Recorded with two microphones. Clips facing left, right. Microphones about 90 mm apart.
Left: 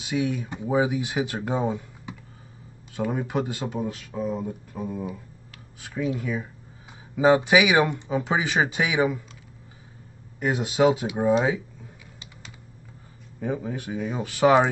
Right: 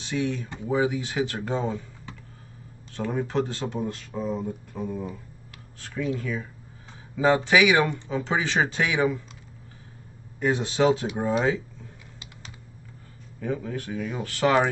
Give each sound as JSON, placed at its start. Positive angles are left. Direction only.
{"t": 0.0, "sound": "speech", "side_deg": 10}
{"t": 10.4, "sound": "speech", "side_deg": 10}
{"t": 13.4, "sound": "speech", "side_deg": 15}